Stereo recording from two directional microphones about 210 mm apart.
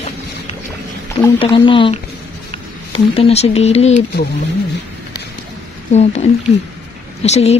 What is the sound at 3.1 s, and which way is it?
Speech, 30° left (ahead or behind).